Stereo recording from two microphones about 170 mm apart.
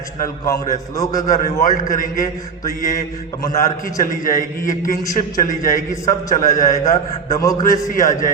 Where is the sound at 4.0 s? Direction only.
50° left (ahead or behind).